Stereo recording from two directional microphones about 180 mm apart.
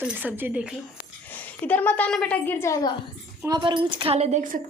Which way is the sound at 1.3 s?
10° left (ahead or behind).